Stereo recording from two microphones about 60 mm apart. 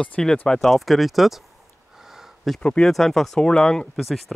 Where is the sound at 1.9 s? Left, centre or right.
Centre.